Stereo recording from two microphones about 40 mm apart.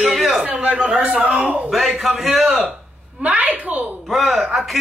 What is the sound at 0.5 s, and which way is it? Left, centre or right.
Speech, right.